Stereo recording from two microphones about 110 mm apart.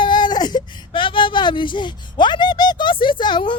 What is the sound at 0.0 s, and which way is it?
Speech, 45° left (ahead or behind).